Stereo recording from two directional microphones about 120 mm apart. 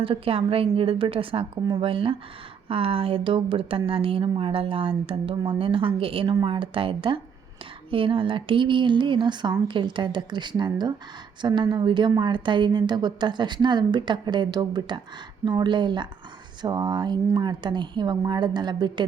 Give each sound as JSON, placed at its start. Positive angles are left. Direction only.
{"t": 0.0, "sound": "a woman's voice", "side_deg": -50}